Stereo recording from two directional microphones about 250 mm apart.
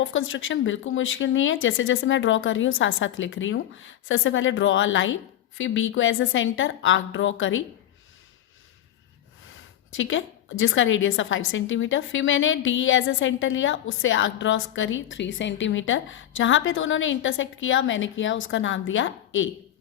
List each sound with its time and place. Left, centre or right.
0.0 s a woman's voice: left
9.9 s a woman's voice: left